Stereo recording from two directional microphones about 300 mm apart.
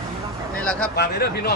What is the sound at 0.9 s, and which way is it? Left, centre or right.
Speech, left.